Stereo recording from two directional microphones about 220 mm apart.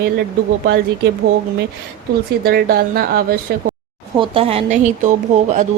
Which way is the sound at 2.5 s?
45° right (ahead or behind).